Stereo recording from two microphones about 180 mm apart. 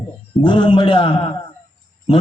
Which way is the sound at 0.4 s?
25° left (ahead or behind).